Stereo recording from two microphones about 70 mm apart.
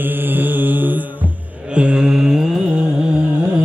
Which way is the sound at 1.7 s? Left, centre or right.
Centre.